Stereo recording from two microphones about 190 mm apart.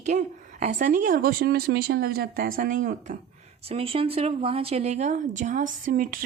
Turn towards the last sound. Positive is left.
turn(degrees=-45)  # may be behind; listen again after turning